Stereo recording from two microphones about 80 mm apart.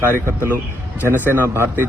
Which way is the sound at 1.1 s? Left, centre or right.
Right.